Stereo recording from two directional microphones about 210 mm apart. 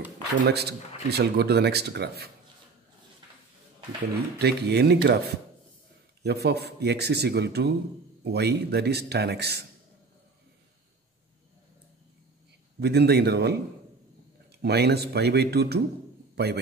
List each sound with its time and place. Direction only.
0.3 s speech: 50° right (ahead or behind)
4.4 s speech: 50° right (ahead or behind)
12.8 s speech: 50° right (ahead or behind)
14.6 s speech: 50° right (ahead or behind)